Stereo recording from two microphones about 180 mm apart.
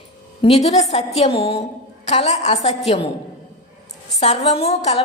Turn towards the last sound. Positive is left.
turn(degrees=35)  # may be behind; listen again after turning